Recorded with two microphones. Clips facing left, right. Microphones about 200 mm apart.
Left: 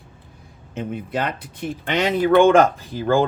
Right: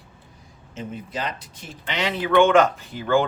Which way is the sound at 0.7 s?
60° left (ahead or behind).